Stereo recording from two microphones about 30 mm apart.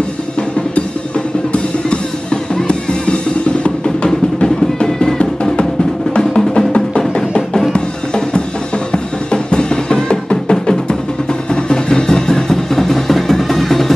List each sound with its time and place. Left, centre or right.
2.5 s music: left
7.7 s music: left
11.5 s music: left; by 13.9 s centre